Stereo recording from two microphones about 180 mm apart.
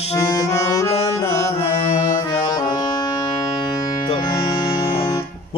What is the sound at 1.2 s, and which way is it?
Speech, 35° left (ahead or behind).